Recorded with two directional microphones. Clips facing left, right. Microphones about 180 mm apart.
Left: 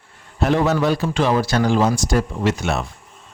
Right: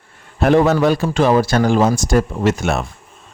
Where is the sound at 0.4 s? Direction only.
55° right (ahead or behind).